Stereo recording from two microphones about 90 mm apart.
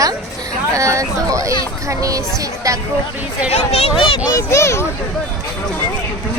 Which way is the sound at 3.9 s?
90° left.